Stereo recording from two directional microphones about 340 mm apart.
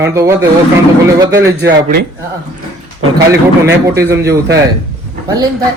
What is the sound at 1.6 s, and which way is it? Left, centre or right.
Speech, right.